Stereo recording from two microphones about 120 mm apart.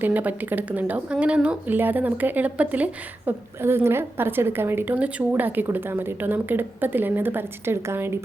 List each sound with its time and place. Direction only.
0.0 s speech: 15° right (ahead or behind)